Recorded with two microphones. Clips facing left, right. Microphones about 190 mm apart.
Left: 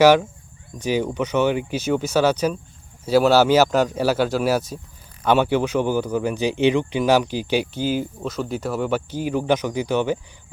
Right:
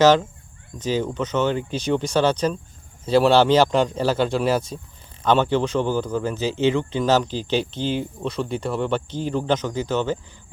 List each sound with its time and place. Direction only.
0.0 s speech: 10° left (ahead or behind)